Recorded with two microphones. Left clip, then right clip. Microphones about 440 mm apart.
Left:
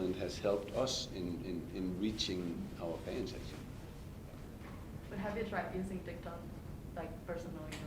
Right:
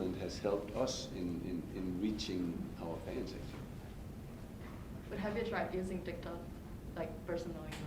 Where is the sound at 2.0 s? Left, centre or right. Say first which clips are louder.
Left 2 dB; left.